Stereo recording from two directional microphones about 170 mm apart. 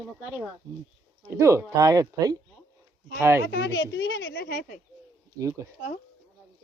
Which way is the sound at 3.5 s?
80° left.